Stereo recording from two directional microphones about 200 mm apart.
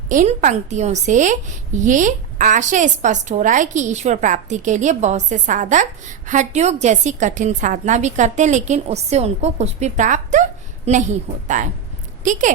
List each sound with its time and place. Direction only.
0.1 s a woman's voice: 40° right (ahead or behind)